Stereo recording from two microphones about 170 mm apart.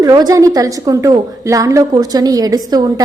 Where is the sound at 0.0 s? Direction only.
20° right (ahead or behind).